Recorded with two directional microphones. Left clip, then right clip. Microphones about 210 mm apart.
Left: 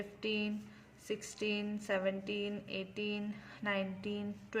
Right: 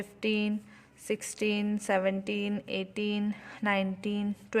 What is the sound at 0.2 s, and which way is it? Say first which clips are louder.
Speech: right 7 dB; 45° right (ahead or behind).